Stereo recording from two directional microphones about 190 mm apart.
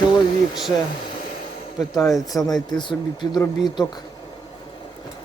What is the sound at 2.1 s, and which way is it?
Speech, centre (ahead or behind).